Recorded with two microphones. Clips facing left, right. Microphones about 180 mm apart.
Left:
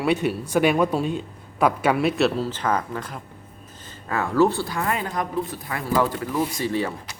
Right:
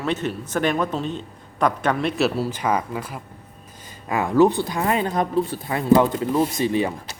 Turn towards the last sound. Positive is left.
turn(degrees=-20)  # may be behind; listen again after turning